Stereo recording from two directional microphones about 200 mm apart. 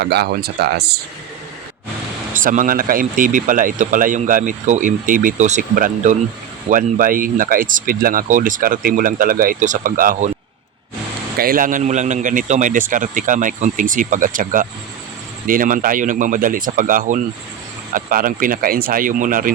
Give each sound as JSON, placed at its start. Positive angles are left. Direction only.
{"t": 0.0, "sound": "speech", "side_deg": -55}
{"t": 2.3, "sound": "speech", "side_deg": -40}
{"t": 11.3, "sound": "speech", "side_deg": -45}